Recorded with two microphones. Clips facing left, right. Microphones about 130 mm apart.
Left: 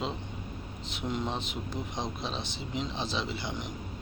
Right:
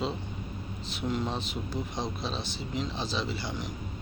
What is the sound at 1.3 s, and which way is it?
Speech, 20° left (ahead or behind).